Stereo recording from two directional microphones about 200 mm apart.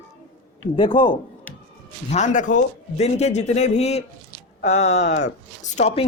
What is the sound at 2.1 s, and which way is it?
A man's voice, 35° left (ahead or behind).